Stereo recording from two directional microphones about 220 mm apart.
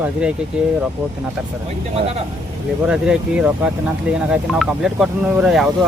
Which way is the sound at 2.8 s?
5° right (ahead or behind).